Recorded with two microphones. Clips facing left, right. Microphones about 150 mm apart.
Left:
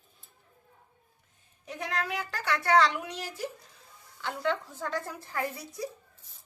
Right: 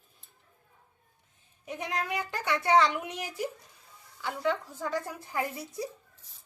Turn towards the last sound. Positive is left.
turn(degrees=-20)  # may be behind; listen again after turning